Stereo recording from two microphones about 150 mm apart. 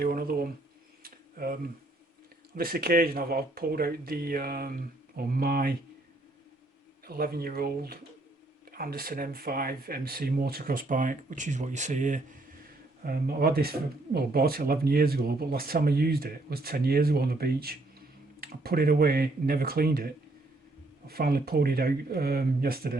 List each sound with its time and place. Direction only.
0.0 s speech: 75° right (ahead or behind)
1.0 s camera: 80° right
2.6 s speech: 80° right
7.1 s speech: 85° right; by 12.4 s 55° right (ahead or behind)
13.1 s speech: 85° right
21.1 s speech: 85° right